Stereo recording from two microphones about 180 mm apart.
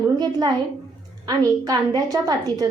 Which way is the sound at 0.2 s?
20° right (ahead or behind).